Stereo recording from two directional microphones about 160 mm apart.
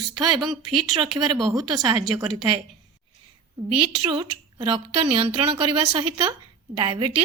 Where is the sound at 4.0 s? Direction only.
30° right (ahead or behind).